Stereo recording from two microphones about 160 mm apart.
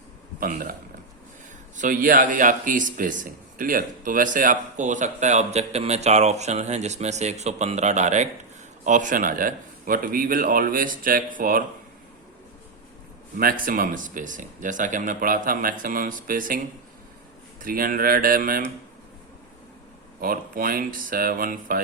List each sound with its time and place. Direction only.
0.3 s speech: 60° right (ahead or behind)
13.3 s speech: 60° right (ahead or behind)
17.6 s speech: 60° right (ahead or behind)
20.2 s speech: 65° right (ahead or behind)